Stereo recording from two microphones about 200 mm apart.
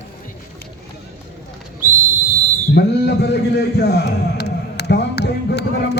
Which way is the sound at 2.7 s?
55° left (ahead or behind).